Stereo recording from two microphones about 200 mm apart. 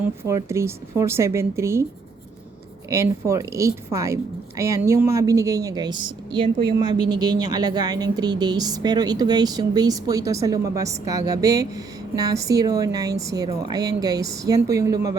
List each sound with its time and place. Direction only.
0.3 s a woman's voice: 15° right (ahead or behind)
2.9 s a woman's voice: 15° right (ahead or behind)